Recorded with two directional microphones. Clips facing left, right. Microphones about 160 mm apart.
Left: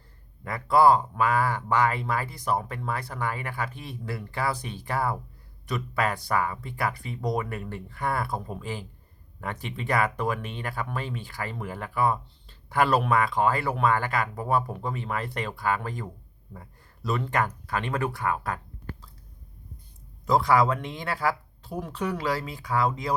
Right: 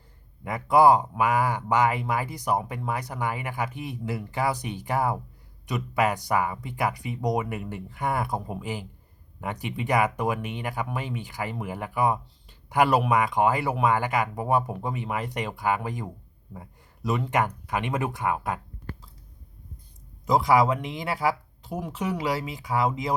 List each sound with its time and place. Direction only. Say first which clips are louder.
0.4 s speech: right 1 dB; 15° right (ahead or behind)
20.2 s speech: right 1 dB; 15° right (ahead or behind)